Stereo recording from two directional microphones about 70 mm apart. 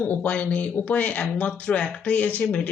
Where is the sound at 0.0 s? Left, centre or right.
Left.